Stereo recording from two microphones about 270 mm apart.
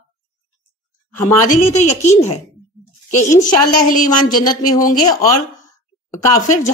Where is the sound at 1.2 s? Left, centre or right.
Left.